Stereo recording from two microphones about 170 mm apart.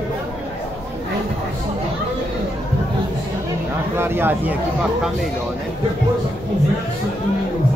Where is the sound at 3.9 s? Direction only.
15° right (ahead or behind).